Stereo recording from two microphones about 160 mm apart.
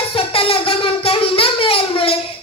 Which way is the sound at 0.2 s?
35° left (ahead or behind).